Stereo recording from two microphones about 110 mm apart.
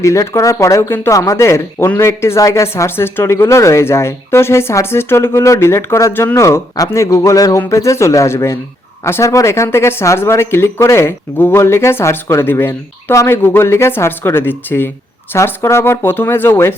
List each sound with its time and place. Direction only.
0.0 s speech: 30° left (ahead or behind)
7.2 s a sound: 30° left (ahead or behind)
7.7 s speech: 25° left (ahead or behind)